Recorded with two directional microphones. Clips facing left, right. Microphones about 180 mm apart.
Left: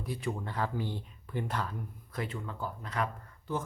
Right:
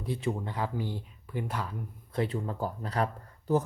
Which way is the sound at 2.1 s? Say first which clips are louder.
Right 7 dB; 35° right (ahead or behind).